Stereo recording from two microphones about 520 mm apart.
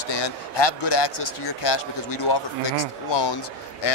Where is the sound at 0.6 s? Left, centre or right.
Left.